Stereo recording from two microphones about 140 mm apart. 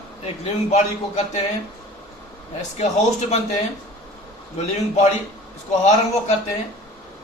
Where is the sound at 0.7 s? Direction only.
50° left (ahead or behind).